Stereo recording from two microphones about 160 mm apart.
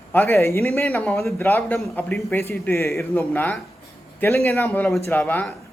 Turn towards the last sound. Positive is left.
turn(degrees=10)  # may be behind; listen again after turning